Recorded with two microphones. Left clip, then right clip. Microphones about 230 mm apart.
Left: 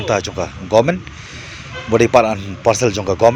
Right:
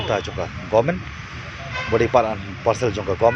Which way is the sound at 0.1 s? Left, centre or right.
Left.